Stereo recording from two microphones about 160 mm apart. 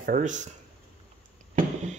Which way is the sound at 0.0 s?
55° right (ahead or behind).